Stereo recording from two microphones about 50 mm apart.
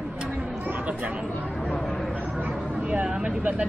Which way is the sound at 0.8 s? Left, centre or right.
Right.